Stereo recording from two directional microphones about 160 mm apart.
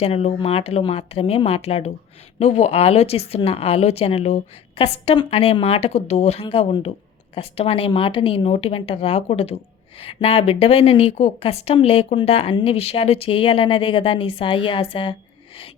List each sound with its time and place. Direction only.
0.0 s a woman's voice: 40° left (ahead or behind)